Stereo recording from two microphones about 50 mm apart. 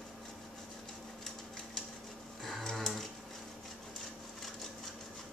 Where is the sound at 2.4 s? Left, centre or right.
Centre.